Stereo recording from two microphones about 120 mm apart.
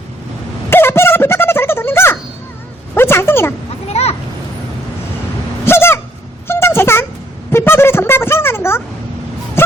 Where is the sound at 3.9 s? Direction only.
60° left (ahead or behind).